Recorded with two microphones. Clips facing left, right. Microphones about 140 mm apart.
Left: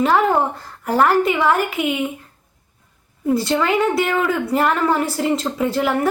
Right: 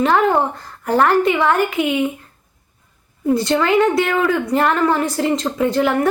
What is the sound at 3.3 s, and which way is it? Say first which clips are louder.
A woman's voice: right 3 dB; centre (ahead or behind).